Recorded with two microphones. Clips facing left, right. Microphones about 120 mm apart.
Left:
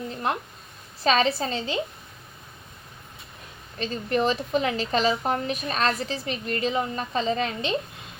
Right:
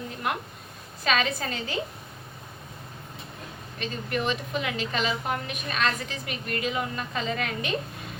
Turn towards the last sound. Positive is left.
turn(degrees=25)  # may be behind; listen again after turning